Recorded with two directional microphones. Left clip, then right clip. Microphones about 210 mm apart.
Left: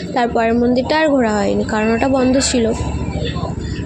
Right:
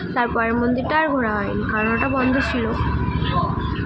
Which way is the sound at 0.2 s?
35° left (ahead or behind).